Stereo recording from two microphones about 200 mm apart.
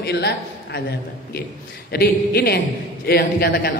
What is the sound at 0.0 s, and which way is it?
Speech, 55° left (ahead or behind).